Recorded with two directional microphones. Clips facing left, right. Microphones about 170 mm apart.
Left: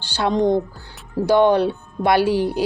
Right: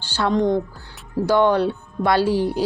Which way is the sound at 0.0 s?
15° left (ahead or behind).